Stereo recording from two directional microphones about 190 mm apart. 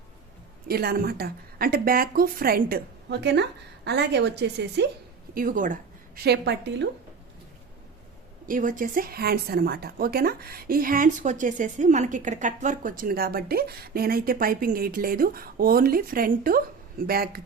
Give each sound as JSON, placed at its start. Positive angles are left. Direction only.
{"t": 0.7, "sound": "a woman's voice", "side_deg": -55}
{"t": 5.3, "sound": "speech", "side_deg": -50}
{"t": 6.2, "sound": "a woman's voice", "side_deg": -65}
{"t": 8.4, "sound": "speech", "side_deg": -45}